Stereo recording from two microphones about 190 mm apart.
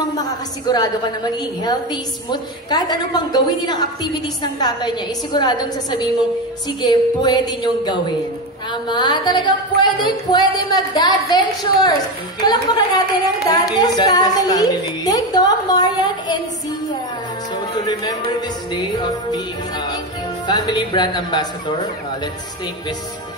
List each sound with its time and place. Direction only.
0.0 s a woman's voice: 20° left (ahead or behind)
17.7 s a woman's voice: 20° left (ahead or behind)